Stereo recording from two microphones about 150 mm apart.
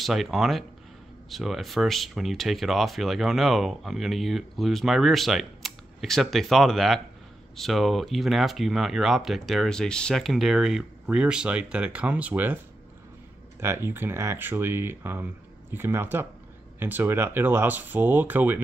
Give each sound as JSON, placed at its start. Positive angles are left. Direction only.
{"t": 0.0, "sound": "speech", "side_deg": 0}
{"t": 13.6, "sound": "speech", "side_deg": -15}